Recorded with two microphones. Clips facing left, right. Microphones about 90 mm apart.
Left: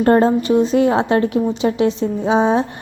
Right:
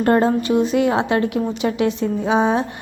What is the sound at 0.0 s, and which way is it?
A woman's voice, 30° left (ahead or behind).